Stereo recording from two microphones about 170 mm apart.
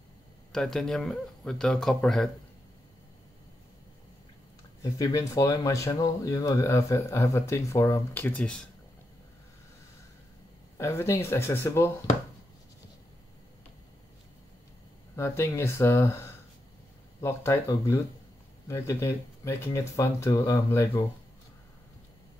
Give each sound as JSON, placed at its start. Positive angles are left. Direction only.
{"t": 0.5, "sound": "a man's voice", "side_deg": 5}
{"t": 4.9, "sound": "speech", "side_deg": 20}
{"t": 10.8, "sound": "speech", "side_deg": 15}
{"t": 15.1, "sound": "speech", "side_deg": 15}